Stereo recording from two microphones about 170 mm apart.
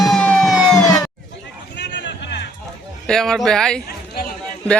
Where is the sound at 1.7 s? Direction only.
90° left.